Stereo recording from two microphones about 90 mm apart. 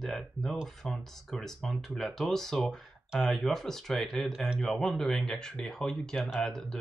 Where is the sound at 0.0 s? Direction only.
5° left (ahead or behind).